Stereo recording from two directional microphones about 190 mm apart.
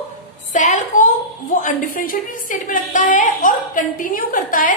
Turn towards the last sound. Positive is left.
turn(degrees=45)  # may be behind; listen again after turning